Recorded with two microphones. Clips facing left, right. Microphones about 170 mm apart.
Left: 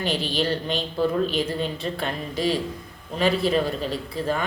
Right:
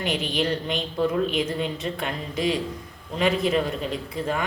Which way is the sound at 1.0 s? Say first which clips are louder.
Even; 15° right (ahead or behind).